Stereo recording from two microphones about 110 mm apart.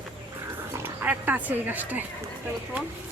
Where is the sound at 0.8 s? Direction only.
20° right (ahead or behind).